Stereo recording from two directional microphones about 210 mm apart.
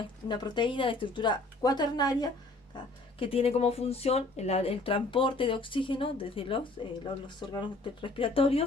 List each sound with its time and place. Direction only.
0.3 s speech: 20° left (ahead or behind)